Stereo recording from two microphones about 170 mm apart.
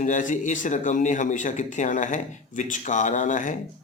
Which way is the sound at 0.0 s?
50° left (ahead or behind).